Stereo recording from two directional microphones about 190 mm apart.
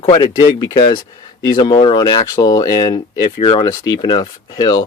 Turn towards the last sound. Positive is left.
turn(degrees=20)  # may be behind; listen again after turning